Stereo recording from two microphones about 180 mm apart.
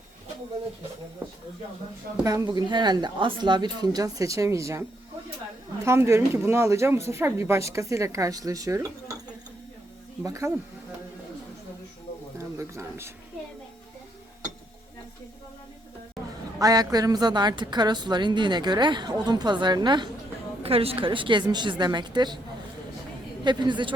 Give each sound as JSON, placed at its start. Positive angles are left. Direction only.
{"t": 2.2, "sound": "speech", "side_deg": -20}
{"t": 10.2, "sound": "speech", "side_deg": -15}
{"t": 12.4, "sound": "speech", "side_deg": -15}
{"t": 16.6, "sound": "speech", "side_deg": -20}
{"t": 23.4, "sound": "speech", "side_deg": -25}